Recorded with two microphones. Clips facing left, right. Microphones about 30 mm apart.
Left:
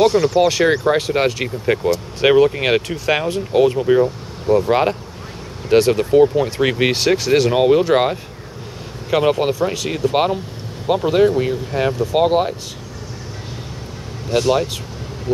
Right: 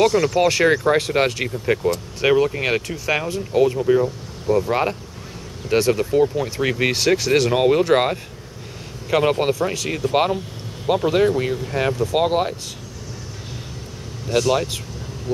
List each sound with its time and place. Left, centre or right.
0.0 s speech: left
0.8 s speech: centre
1.5 s speech: centre
7.0 s speech: centre
9.3 s speech: centre
14.3 s speech: centre
15.3 s speech: left